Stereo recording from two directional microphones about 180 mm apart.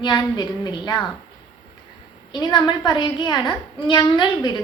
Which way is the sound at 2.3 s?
25° left (ahead or behind).